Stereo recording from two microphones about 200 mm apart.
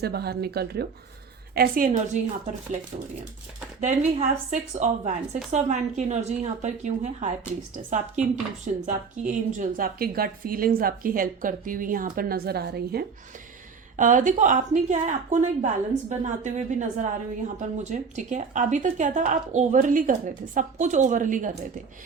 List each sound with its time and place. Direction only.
0.0 s a woman's voice: 50° right (ahead or behind)
3.8 s a woman's voice: 35° right (ahead or behind); by 13.1 s 55° right (ahead or behind)
13.9 s a woman's voice: 40° right (ahead or behind)